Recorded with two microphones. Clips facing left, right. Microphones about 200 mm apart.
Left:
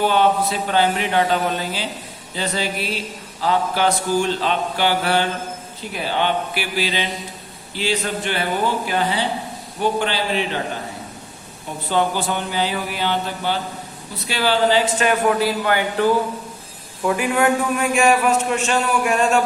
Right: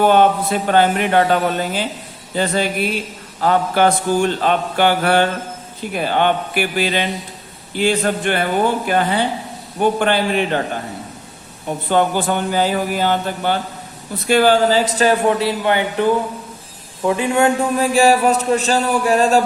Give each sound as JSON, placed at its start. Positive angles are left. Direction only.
{"t": 0.1, "sound": "a man's voice", "side_deg": -50}
{"t": 11.9, "sound": "a man's voice", "side_deg": -50}